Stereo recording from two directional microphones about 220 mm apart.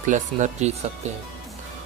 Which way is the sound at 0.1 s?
35° right (ahead or behind).